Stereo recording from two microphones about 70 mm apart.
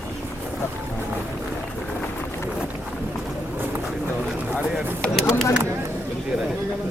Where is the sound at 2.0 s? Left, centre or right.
Left.